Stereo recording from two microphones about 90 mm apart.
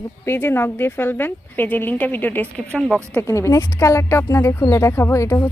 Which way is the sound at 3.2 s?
30° left (ahead or behind).